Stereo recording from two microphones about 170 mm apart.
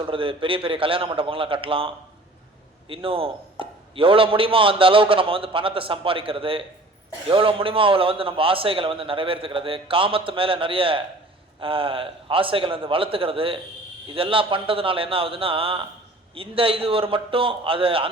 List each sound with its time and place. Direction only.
0.0 s a man's voice: 30° right (ahead or behind)
2.9 s a man's voice: 30° right (ahead or behind)